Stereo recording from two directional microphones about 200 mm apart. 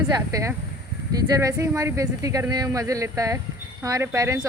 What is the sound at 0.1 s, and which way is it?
Speech, 15° right (ahead or behind).